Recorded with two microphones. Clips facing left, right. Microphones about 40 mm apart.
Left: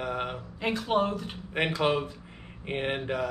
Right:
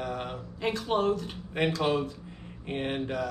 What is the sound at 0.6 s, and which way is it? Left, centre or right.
Speech, centre.